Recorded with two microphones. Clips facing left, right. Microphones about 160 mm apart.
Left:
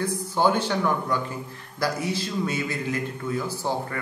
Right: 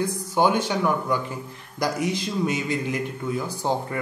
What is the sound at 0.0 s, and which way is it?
Speech, 15° right (ahead or behind).